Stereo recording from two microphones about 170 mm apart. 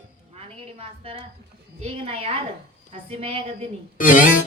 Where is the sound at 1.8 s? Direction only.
35° right (ahead or behind).